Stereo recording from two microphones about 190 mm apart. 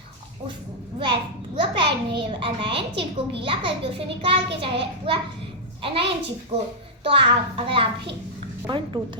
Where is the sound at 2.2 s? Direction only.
30° right (ahead or behind).